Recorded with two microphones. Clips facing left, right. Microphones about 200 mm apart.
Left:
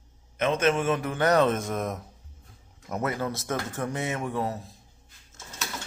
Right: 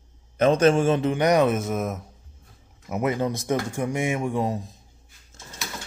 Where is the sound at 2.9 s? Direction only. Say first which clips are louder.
Right 5 dB; 15° right (ahead or behind).